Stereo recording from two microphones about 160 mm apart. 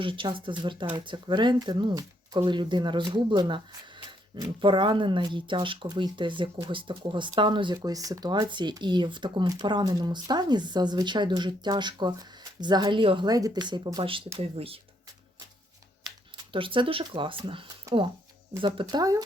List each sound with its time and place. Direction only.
0.0 s speech: 30° right (ahead or behind)
16.0 s speech: 30° right (ahead or behind)